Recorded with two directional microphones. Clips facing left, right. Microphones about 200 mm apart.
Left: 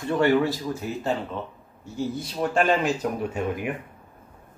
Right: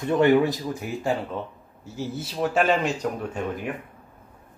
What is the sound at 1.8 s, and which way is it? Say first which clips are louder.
Speech: left 2 dB; 5° right (ahead or behind).